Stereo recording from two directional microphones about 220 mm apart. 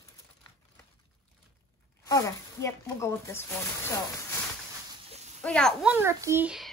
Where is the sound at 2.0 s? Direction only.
15° left (ahead or behind).